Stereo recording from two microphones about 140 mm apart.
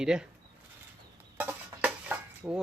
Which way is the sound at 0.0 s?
5° right (ahead or behind).